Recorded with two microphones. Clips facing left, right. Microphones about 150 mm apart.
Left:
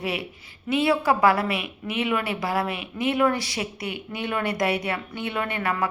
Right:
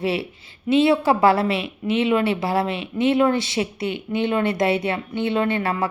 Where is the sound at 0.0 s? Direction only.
30° right (ahead or behind).